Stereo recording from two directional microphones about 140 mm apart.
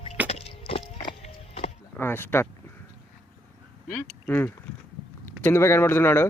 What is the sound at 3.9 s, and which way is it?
A man's voice, 15° left (ahead or behind).